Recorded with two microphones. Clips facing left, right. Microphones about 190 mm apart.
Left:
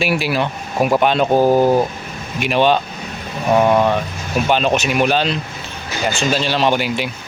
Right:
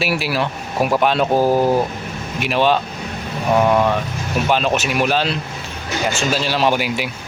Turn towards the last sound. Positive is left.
turn(degrees=-5)  # may be behind; listen again after turning